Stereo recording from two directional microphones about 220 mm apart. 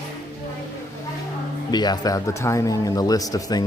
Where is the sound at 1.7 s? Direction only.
20° left (ahead or behind).